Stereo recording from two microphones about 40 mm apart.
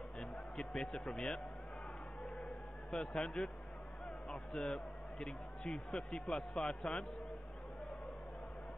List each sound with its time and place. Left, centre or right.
0.2 s speech: centre
2.9 s a man's voice: centre